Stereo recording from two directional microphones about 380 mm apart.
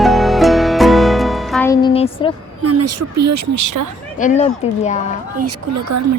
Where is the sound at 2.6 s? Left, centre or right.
Right.